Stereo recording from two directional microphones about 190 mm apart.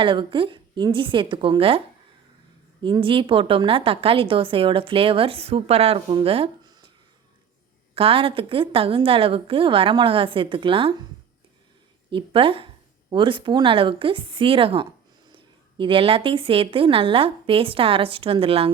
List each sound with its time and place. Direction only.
0.0 s a woman's voice: 25° right (ahead or behind)
2.8 s a woman's voice: 25° right (ahead or behind)
7.9 s a woman's voice: 30° right (ahead or behind)
12.1 s a woman's voice: 30° right (ahead or behind)